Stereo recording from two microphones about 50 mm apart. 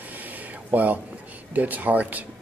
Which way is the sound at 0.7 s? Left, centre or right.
Right.